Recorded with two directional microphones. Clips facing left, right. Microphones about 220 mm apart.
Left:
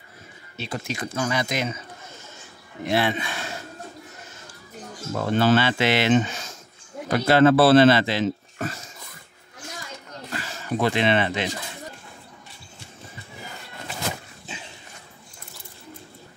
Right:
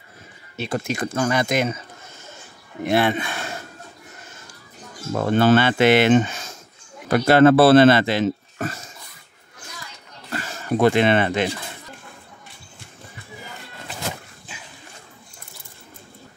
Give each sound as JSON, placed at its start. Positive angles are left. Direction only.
{"t": 0.6, "sound": "speech", "side_deg": -50}
{"t": 2.8, "sound": "speech", "side_deg": -55}
{"t": 5.3, "sound": "speech", "side_deg": -50}
{"t": 10.3, "sound": "speech", "side_deg": -50}